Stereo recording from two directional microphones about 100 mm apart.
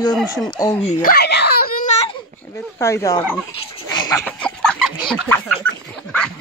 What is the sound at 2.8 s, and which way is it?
Speech, 30° left (ahead or behind).